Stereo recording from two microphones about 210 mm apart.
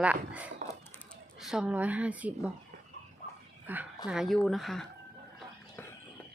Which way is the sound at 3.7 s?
10° right (ahead or behind).